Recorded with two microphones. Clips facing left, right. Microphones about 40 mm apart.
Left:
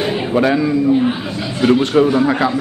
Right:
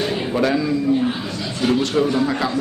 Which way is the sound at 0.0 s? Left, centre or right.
Left.